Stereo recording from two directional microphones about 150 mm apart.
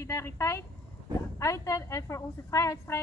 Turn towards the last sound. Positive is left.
turn(degrees=20)  # may be behind; listen again after turning